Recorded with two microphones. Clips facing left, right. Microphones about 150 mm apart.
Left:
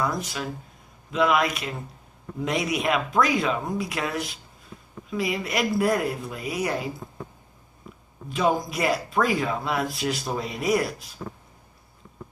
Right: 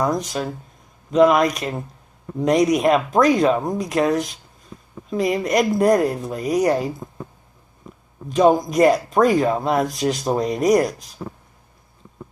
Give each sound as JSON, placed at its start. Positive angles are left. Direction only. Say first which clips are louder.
{"t": 0.0, "sound": "speech", "louder": "right 6 dB", "side_deg": -40}
{"t": 8.3, "sound": "speech", "louder": "right 8 dB", "side_deg": -40}